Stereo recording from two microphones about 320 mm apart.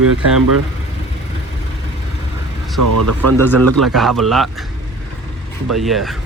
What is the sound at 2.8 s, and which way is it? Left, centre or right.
Speech, right.